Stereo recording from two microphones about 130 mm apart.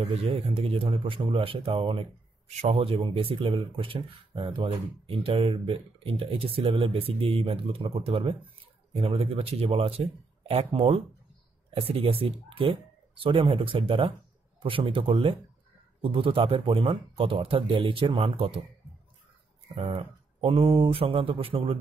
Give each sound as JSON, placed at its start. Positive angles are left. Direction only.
{"t": 0.0, "sound": "a man's voice", "side_deg": -45}
{"t": 19.7, "sound": "speech", "side_deg": -50}